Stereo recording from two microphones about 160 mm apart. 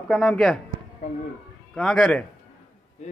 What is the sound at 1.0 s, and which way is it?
Speech, 55° left (ahead or behind).